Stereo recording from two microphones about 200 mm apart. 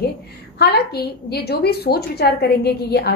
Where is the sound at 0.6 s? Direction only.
55° left (ahead or behind).